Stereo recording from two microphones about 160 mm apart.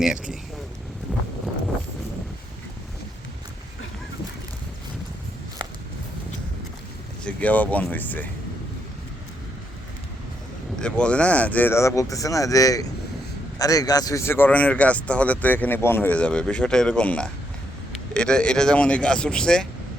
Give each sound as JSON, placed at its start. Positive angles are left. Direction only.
{"t": 0.0, "sound": "speech", "side_deg": -5}
{"t": 7.3, "sound": "speech", "side_deg": 10}
{"t": 10.8, "sound": "speech", "side_deg": 5}